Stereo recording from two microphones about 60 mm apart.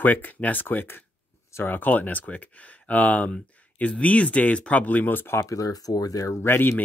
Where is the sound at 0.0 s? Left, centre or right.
Left.